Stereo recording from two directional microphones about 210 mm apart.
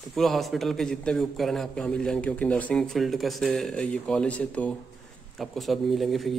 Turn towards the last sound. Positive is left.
turn(degrees=0)  # may be behind; listen again after turning